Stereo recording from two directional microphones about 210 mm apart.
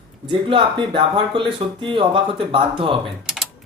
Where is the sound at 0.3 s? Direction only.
25° right (ahead or behind).